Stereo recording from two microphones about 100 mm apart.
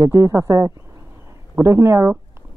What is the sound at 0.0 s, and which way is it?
Speech, 35° right (ahead or behind).